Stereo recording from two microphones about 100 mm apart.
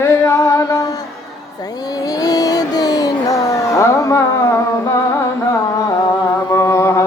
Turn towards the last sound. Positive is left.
turn(degrees=30)  # may be behind; listen again after turning